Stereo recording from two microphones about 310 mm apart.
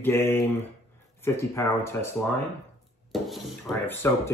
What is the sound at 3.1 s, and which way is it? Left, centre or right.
Speech, centre.